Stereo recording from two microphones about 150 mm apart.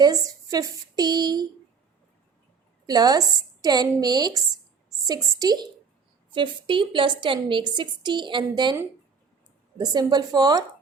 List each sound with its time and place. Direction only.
0.0 s a woman's voice: 25° right (ahead or behind)
2.8 s a woman's voice: 25° right (ahead or behind)
9.7 s a woman's voice: 25° right (ahead or behind)